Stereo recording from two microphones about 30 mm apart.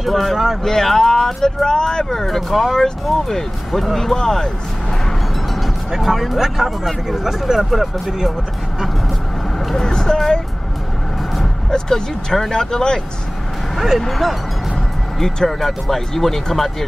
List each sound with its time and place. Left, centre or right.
0.0 s speech: centre; by 2.2 s left
2.2 s speech: centre
2.7 s speech: centre
5.9 s speech: centre
9.8 s speech: centre
11.7 s speech: centre
13.7 s speech: centre
14.0 s speech: centre
15.1 s speech: centre